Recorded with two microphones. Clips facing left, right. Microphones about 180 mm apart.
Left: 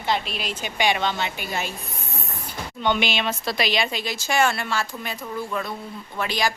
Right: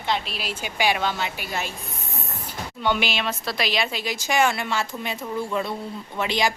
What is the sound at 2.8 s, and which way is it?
A woman's voice, 5° right (ahead or behind).